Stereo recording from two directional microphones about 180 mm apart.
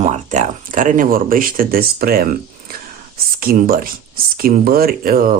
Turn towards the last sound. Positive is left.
turn(degrees=-55)  # may be behind; listen again after turning